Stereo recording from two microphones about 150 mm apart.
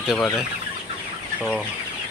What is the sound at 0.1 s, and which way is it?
Speech, centre (ahead or behind).